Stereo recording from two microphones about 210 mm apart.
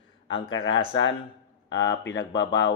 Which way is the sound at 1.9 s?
60° left (ahead or behind).